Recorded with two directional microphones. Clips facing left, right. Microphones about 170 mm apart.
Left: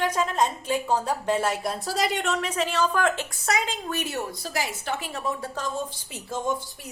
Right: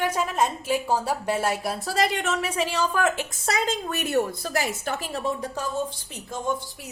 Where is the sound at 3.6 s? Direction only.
50° right (ahead or behind); by 5.3 s 35° right (ahead or behind).